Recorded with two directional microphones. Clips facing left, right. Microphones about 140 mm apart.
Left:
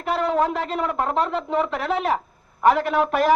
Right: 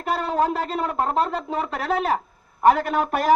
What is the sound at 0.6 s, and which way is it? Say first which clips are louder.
Speech: even; 35° right (ahead or behind).